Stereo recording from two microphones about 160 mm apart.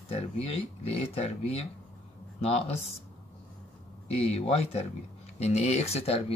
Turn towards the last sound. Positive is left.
turn(degrees=40)  # may be behind; listen again after turning